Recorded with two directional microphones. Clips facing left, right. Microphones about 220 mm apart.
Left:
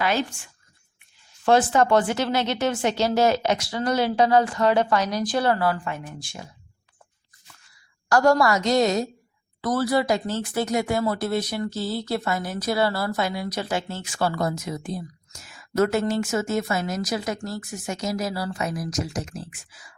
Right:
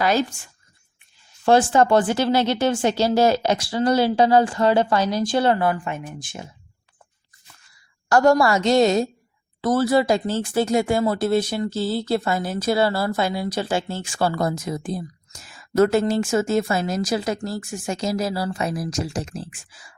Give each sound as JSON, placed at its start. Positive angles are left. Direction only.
{"t": 0.0, "sound": "a woman's voice", "side_deg": -40}
{"t": 1.5, "sound": "speech", "side_deg": -30}
{"t": 8.1, "sound": "speech", "side_deg": -25}